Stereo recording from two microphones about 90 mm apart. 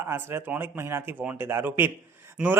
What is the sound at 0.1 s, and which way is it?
A man's voice, 25° right (ahead or behind).